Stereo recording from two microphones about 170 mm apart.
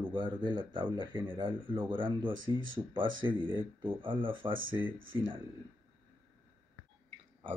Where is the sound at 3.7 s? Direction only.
30° right (ahead or behind).